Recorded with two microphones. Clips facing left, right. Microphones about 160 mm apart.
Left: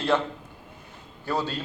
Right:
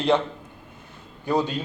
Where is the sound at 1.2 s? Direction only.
15° right (ahead or behind).